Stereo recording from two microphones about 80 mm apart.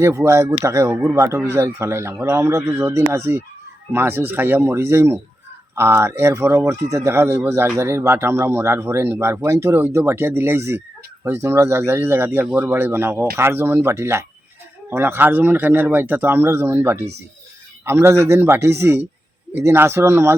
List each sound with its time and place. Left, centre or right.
0.0 s speech: right
9.4 s speech: right